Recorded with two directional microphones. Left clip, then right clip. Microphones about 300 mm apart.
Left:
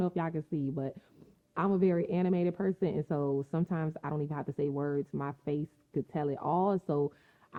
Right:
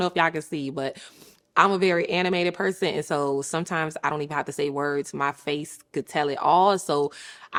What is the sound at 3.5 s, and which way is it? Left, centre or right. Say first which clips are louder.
A woman's voice: right 10 dB; centre.